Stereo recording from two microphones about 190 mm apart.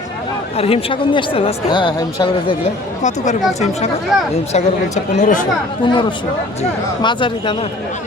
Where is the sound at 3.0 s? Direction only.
40° left (ahead or behind).